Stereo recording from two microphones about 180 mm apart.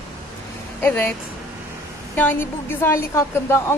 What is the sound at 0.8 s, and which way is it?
Speech, 10° left (ahead or behind).